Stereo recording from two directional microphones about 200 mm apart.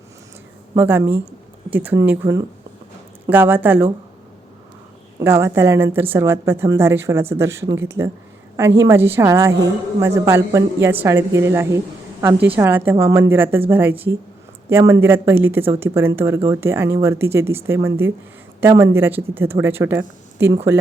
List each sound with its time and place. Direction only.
0.8 s a woman's voice: 10° right (ahead or behind)
5.2 s a woman's voice: 10° right (ahead or behind)